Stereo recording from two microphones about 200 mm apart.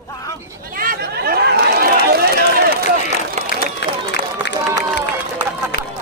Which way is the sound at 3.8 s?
55° left (ahead or behind).